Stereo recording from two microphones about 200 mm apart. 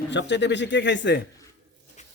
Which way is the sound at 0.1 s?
60° left (ahead or behind).